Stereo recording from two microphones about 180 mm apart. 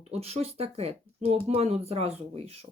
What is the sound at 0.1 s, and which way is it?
Speech, 35° right (ahead or behind).